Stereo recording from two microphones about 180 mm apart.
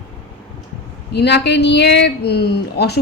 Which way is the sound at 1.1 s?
70° left (ahead or behind).